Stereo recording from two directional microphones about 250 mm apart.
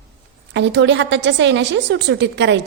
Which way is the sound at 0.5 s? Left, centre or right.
Right.